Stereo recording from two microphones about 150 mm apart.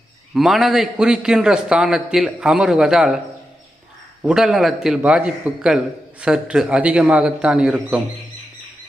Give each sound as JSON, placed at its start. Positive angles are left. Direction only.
{"t": 0.3, "sound": "a man's voice", "side_deg": 0}
{"t": 4.2, "sound": "a man's voice", "side_deg": -5}